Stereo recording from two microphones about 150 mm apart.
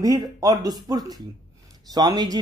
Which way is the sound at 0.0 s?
25° right (ahead or behind).